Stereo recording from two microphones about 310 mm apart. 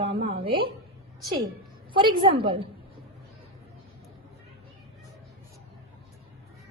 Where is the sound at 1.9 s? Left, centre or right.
Centre.